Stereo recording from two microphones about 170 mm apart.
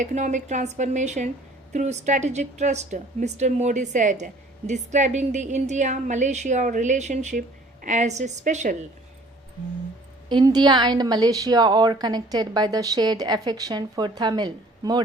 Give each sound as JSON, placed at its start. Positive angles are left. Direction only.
{"t": 0.0, "sound": "a woman's voice", "side_deg": -45}
{"t": 10.2, "sound": "a woman's voice", "side_deg": -25}